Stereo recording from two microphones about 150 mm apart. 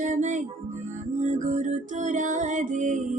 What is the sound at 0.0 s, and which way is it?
Music, 55° right (ahead or behind).